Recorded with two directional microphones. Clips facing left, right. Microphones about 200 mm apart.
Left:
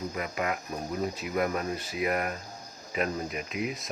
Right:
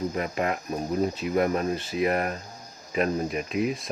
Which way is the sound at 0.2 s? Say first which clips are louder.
Right 4 dB; 30° right (ahead or behind).